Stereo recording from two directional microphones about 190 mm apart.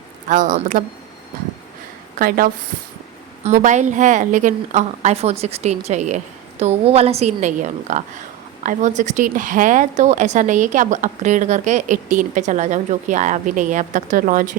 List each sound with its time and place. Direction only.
0.3 s speech: 40° right (ahead or behind)
2.1 s speech: 50° right (ahead or behind)
3.4 s a woman's voice: 40° right (ahead or behind)